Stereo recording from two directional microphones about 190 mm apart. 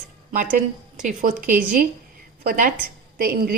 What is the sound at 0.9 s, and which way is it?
A woman's voice, 40° right (ahead or behind).